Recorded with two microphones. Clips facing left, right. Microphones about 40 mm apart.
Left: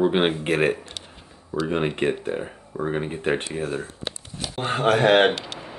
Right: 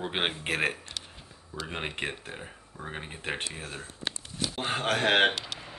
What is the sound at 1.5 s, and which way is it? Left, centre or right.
Speech, left.